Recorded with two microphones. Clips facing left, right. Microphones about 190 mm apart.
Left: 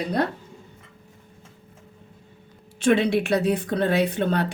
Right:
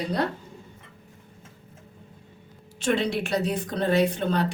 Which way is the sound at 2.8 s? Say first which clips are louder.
Left 5 dB; 55° left (ahead or behind).